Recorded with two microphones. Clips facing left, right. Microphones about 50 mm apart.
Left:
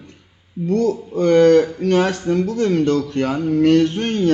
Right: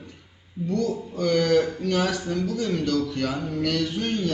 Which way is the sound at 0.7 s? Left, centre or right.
Left.